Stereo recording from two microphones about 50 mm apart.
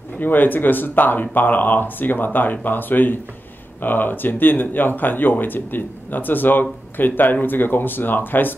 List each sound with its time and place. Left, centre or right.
0.2 s speech: left